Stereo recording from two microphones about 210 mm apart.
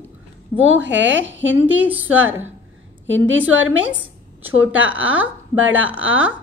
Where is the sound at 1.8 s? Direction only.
5° right (ahead or behind).